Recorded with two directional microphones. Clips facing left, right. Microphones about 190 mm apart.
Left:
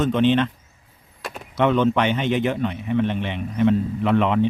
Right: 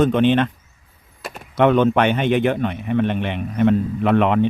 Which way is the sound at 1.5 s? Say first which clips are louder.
Right 3 dB; 55° right (ahead or behind).